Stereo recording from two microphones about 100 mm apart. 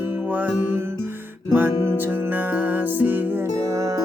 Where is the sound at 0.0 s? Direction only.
20° right (ahead or behind).